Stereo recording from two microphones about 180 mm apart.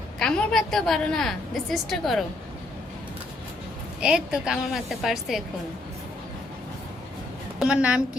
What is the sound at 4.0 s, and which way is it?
A woman's voice, 5° right (ahead or behind).